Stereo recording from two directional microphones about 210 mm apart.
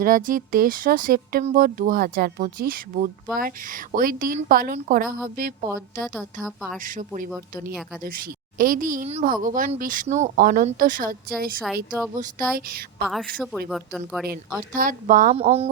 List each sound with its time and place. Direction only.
0.0 s speech: 40° right (ahead or behind)
13.1 s speech: centre (ahead or behind)
14.7 s speech: 40° right (ahead or behind)
15.4 s music: 30° right (ahead or behind)